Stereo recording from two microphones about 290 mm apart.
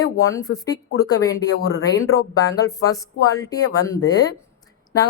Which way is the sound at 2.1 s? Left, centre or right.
Centre.